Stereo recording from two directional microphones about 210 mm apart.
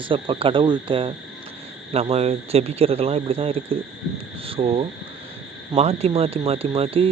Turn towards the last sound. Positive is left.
turn(degrees=-25)  # may be behind; listen again after turning